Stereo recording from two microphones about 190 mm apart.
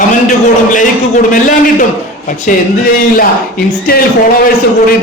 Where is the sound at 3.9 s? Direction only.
50° left (ahead or behind).